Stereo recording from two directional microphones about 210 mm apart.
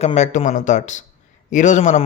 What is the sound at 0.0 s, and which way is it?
Speech, 35° left (ahead or behind).